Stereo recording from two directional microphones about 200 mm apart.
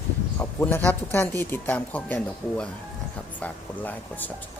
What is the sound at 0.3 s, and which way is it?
Speech, 10° left (ahead or behind).